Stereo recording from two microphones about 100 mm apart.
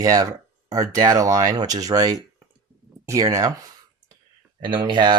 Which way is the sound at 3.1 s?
30° right (ahead or behind).